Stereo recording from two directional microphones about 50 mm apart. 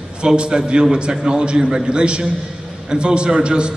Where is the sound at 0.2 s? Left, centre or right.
Centre.